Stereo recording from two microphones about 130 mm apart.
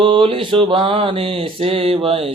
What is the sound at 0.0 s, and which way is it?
Mantra, 45° right (ahead or behind).